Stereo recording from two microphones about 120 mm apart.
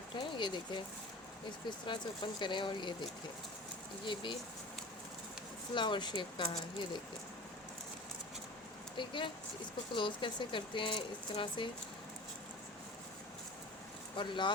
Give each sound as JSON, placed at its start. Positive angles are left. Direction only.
{"t": 0.2, "sound": "a sound", "side_deg": 40}
{"t": 1.5, "sound": "speech", "side_deg": 40}
{"t": 5.7, "sound": "speech", "side_deg": 40}
{"t": 9.0, "sound": "speech", "side_deg": 40}
{"t": 14.2, "sound": "speech", "side_deg": 40}